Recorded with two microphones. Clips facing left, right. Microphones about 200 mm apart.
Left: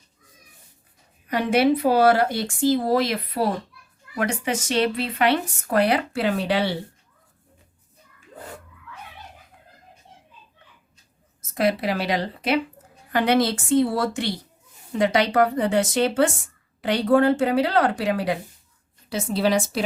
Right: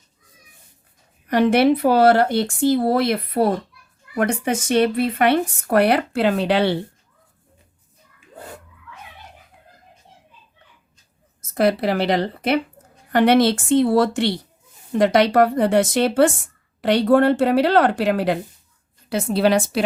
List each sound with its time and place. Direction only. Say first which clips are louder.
1.4 s speech: right 4 dB; 60° right (ahead or behind)
11.5 s a woman's voice: right 4 dB; 60° right (ahead or behind)